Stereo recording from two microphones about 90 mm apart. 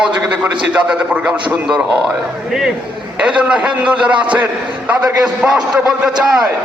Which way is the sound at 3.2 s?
10° right (ahead or behind).